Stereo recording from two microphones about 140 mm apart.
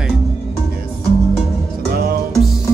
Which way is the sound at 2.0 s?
90° right.